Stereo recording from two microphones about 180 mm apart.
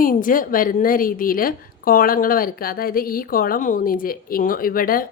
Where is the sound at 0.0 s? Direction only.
50° left (ahead or behind).